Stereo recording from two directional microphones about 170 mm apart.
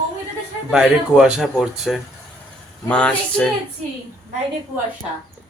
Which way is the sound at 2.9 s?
5° left (ahead or behind).